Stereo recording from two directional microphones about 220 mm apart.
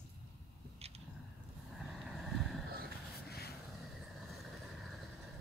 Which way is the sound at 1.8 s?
Centre (ahead or behind).